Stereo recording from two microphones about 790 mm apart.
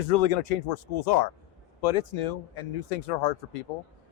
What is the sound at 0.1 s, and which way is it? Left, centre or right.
Speech, left.